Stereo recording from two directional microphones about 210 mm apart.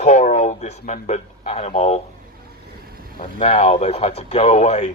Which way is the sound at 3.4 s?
30° left (ahead or behind).